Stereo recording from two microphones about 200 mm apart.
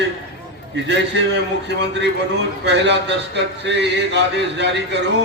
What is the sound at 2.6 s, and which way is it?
A man's voice, 60° right (ahead or behind).